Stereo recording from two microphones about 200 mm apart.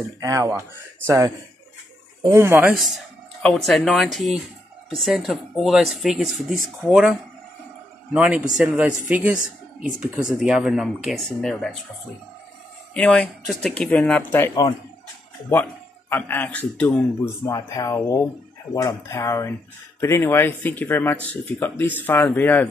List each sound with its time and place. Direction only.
0.2 s speech: 15° right (ahead or behind)
2.7 s speech: centre (ahead or behind)
12.9 s speech: 5° left (ahead or behind)